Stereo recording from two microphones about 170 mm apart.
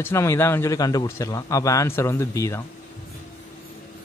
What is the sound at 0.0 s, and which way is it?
Speech, 15° left (ahead or behind).